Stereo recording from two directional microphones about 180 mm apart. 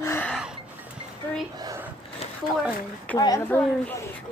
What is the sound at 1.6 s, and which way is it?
Speech, 20° right (ahead or behind).